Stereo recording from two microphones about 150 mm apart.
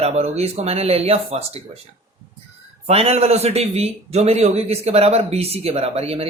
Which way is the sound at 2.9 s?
45° right (ahead or behind).